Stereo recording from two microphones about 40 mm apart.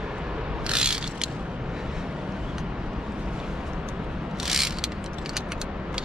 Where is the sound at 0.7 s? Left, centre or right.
Right.